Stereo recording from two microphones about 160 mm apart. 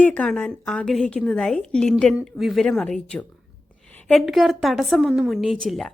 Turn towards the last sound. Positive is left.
turn(degrees=0)  # may be behind; listen again after turning